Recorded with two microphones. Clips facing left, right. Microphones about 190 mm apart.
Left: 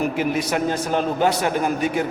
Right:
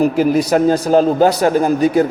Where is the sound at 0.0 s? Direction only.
35° right (ahead or behind).